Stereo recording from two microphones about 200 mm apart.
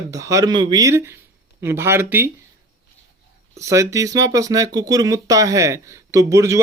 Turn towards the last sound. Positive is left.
turn(degrees=-15)  # may be behind; listen again after turning